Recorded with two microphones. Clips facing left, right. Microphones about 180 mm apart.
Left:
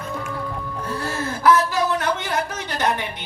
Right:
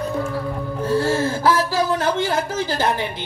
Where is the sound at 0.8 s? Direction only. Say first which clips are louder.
Right 9 dB; 30° right (ahead or behind).